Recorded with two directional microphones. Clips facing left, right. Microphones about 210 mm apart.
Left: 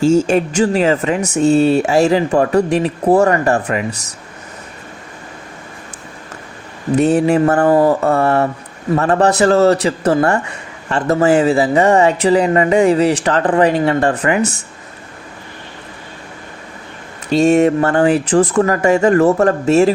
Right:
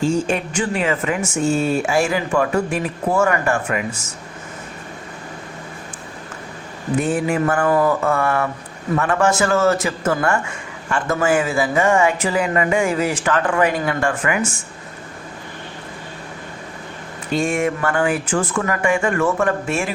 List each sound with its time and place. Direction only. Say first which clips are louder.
0.0 s speech: left 7 dB; 40° left (ahead or behind)
7.0 s speech: left 8 dB; 35° left (ahead or behind)
17.3 s speech: left 9 dB; 40° left (ahead or behind)